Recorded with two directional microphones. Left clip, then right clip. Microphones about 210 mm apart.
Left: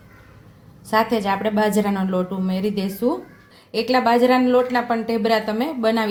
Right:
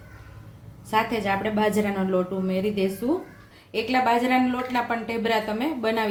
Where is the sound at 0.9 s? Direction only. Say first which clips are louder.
Left 4 dB; 35° left (ahead or behind).